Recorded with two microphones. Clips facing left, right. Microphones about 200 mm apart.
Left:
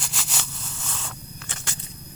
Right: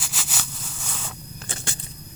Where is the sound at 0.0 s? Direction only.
5° right (ahead or behind).